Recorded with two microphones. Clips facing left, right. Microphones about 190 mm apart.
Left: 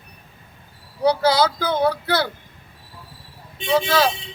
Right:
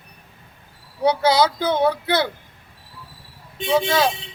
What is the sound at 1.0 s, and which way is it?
Speech, 20° right (ahead or behind).